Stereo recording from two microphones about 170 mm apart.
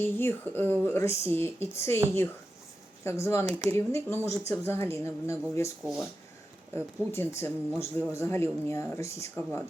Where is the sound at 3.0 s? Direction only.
15° left (ahead or behind).